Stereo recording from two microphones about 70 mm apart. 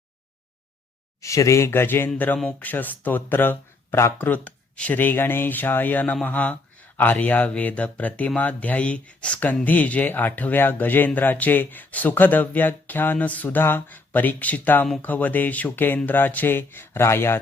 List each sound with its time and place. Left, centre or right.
1.2 s speech: left